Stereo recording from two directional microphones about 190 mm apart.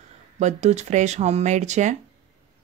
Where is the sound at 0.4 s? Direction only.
35° right (ahead or behind).